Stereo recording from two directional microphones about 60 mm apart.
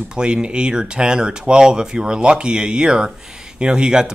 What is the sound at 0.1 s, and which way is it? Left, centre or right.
Speech, centre.